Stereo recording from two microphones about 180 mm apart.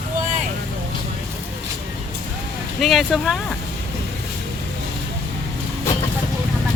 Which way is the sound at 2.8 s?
Centre (ahead or behind).